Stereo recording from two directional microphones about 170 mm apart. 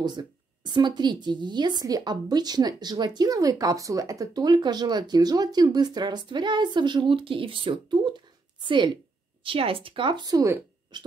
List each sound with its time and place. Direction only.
0.0 s speech: 25° right (ahead or behind)